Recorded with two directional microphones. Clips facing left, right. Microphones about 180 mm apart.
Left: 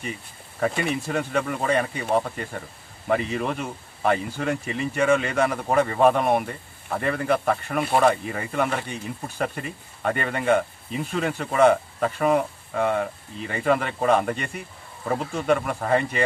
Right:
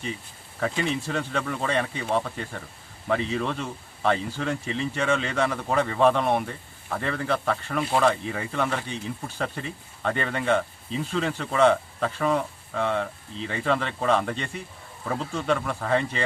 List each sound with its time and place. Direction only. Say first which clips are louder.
0.7 s speech: left 1 dB; 60° left (ahead or behind)
1.0 s speech: left 3 dB; 10° left (ahead or behind)